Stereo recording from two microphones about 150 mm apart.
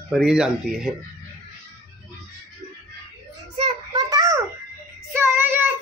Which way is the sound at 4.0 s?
25° right (ahead or behind).